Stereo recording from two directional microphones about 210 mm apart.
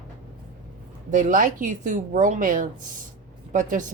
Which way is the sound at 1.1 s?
40° right (ahead or behind).